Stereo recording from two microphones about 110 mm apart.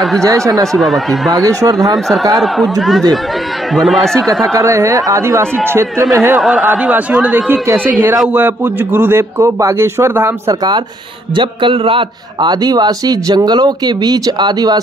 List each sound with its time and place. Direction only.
0.2 s a man's voice: 30° right (ahead or behind)
0.7 s speech: centre (ahead or behind)
1.3 s a man's voice: 35° right (ahead or behind)
2.3 s speech: centre (ahead or behind)
4.6 s a man's voice: 25° right (ahead or behind)
6.4 s a man's voice: 10° right (ahead or behind)
11.3 s a man's voice: 50° right (ahead or behind)